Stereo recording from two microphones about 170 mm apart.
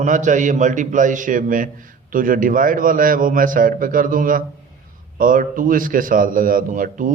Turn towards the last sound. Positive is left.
turn(degrees=-50)  # may be behind; listen again after turning